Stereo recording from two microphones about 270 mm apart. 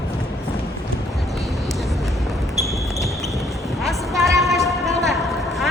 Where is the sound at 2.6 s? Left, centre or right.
Centre.